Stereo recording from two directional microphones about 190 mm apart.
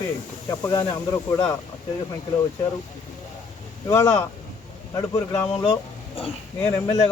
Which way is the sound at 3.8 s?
15° left (ahead or behind).